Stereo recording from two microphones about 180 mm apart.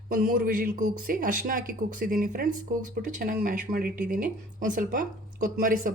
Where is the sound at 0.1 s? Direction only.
50° right (ahead or behind).